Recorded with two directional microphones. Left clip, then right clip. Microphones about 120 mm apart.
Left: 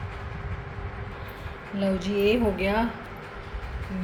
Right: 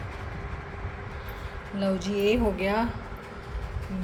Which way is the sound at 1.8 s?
5° left (ahead or behind).